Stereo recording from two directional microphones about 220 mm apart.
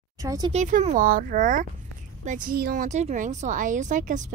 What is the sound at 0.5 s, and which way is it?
A woman's voice, 35° right (ahead or behind).